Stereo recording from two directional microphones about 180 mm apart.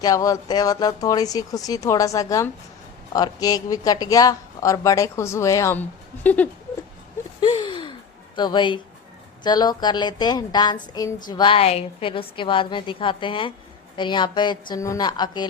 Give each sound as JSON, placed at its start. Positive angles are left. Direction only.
{"t": 0.0, "sound": "a woman's voice", "side_deg": 20}
{"t": 7.4, "sound": "a sound", "side_deg": 25}
{"t": 8.4, "sound": "a woman's voice", "side_deg": 25}